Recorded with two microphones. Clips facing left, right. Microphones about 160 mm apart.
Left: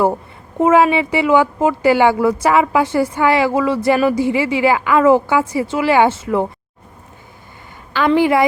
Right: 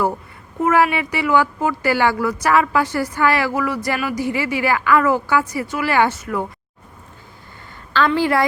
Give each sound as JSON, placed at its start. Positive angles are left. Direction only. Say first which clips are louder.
{"t": 0.6, "sound": "speech", "louder": "left 5 dB", "side_deg": 25}
{"t": 7.9, "sound": "a woman's voice", "louder": "left 4 dB", "side_deg": 15}